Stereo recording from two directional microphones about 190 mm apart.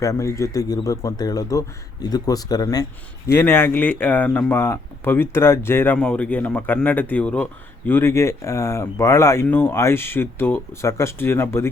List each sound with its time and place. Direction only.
0.0 s speech: 15° left (ahead or behind)